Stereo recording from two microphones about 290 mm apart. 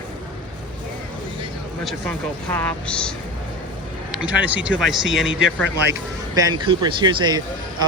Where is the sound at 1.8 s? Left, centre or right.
Centre.